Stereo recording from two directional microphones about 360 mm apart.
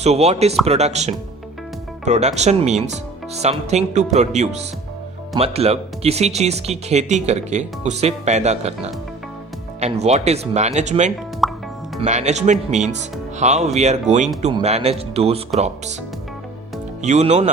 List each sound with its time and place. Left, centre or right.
0.0 s speech: centre
11.4 s music: centre
11.9 s speech: centre
17.0 s speech: centre